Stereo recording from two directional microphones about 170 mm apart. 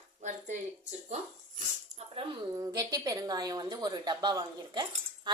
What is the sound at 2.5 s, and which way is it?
Speech, 20° right (ahead or behind).